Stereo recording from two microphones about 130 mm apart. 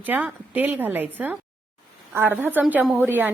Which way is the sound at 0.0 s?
15° right (ahead or behind).